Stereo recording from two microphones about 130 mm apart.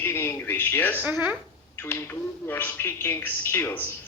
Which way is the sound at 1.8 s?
15° left (ahead or behind).